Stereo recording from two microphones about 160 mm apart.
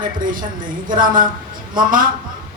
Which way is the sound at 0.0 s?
60° right (ahead or behind).